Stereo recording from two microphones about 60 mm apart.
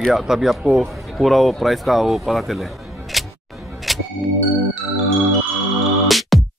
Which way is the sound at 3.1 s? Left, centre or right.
Centre.